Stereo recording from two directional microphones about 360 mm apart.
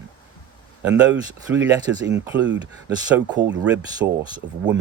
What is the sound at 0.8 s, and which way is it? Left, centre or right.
Speech, centre.